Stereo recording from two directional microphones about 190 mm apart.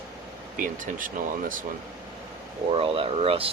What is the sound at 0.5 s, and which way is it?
Speech, 45° right (ahead or behind).